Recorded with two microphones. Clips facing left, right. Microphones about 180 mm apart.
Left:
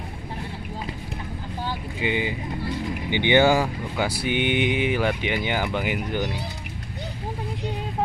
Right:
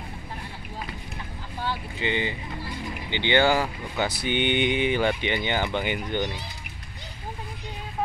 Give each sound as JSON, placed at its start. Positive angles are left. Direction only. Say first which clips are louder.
{"t": 2.0, "sound": "speech", "louder": "left 3 dB", "side_deg": 10}